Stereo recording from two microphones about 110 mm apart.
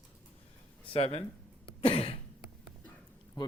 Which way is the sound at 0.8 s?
55° left (ahead or behind).